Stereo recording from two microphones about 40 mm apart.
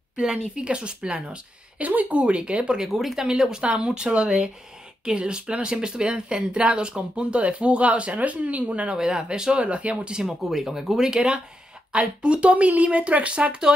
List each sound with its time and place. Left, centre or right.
0.1 s speech: right
1.8 s speech: right
2.2 s speech: right
2.9 s speech: centre
3.3 s speech: centre; by 8.8 s right
8.8 s speech: centre
10.4 s speech: centre
11.1 s speech: right